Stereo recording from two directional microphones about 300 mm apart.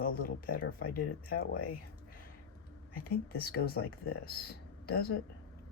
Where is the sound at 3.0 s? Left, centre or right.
Left.